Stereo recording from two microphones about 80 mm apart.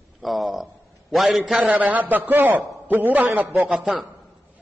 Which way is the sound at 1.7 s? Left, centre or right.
Centre.